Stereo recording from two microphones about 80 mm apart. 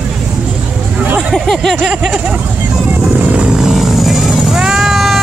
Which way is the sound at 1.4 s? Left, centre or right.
Centre.